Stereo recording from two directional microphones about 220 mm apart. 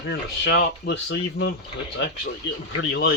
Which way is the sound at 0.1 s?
50° left (ahead or behind).